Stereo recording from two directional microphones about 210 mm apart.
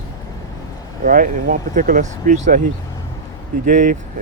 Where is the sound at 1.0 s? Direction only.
40° right (ahead or behind).